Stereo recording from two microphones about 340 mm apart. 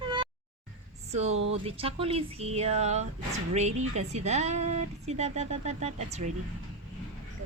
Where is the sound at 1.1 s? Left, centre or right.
Centre.